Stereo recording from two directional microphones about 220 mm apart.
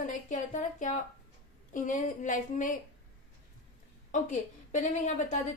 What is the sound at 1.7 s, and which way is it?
A woman's voice, 35° left (ahead or behind).